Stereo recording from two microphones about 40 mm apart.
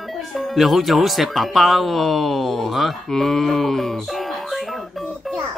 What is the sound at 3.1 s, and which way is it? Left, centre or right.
Music, centre.